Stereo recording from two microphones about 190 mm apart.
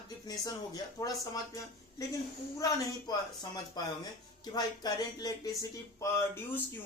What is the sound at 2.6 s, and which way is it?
Speech, 20° left (ahead or behind).